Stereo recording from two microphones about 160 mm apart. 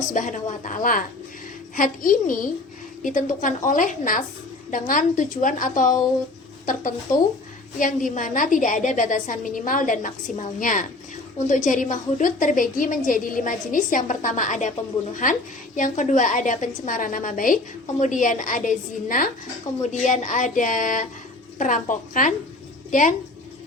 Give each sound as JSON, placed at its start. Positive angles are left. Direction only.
{"t": 0.1, "sound": "a woman's voice", "side_deg": 55}
{"t": 19.7, "sound": "speech", "side_deg": 20}
{"t": 20.1, "sound": "a woman's voice", "side_deg": 50}